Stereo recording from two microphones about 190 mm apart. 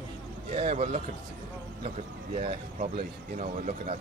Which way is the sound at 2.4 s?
35° right (ahead or behind).